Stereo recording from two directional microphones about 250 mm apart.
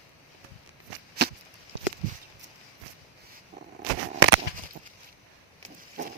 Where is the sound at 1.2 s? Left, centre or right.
Right.